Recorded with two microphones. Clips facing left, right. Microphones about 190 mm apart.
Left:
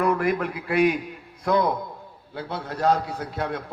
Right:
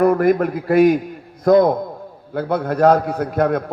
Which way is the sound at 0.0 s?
40° right (ahead or behind).